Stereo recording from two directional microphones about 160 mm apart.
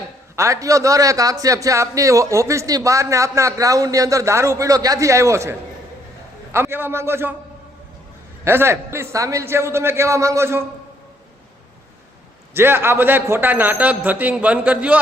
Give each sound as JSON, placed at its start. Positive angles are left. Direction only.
{"t": 0.3, "sound": "a man's voice", "side_deg": -20}
{"t": 8.4, "sound": "a man's voice", "side_deg": -15}
{"t": 12.5, "sound": "a man's voice", "side_deg": -15}